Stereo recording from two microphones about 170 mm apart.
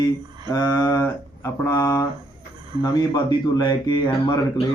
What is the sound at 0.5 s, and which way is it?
Speech, 25° left (ahead or behind).